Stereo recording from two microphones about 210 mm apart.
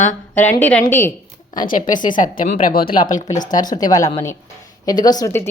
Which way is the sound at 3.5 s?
20° left (ahead or behind).